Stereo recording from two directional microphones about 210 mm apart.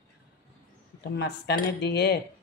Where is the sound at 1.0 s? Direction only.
55° left (ahead or behind).